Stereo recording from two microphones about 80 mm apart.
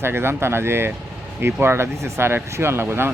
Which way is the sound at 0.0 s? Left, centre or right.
Right.